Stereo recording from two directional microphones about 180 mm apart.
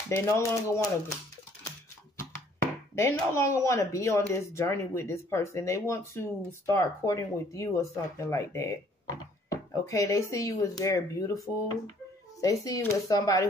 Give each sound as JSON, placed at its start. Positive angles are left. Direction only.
{"t": 0.1, "sound": "speech", "side_deg": 15}
{"t": 3.0, "sound": "speech", "side_deg": 15}